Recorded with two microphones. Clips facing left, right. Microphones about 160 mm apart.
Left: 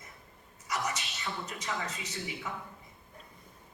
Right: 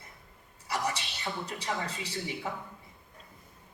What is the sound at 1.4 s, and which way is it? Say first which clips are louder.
A man's voice: right 2 dB; 35° right (ahead or behind).